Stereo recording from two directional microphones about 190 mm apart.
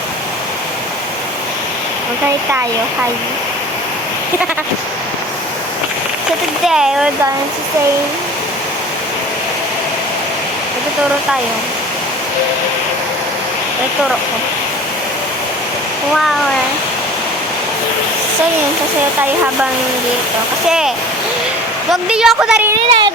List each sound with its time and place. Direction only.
6.7 s a woman's voice: 5° right (ahead or behind)
20.7 s a woman's voice: 5° right (ahead or behind)
22.1 s a woman's voice: 5° right (ahead or behind)
22.9 s speech: 25° right (ahead or behind)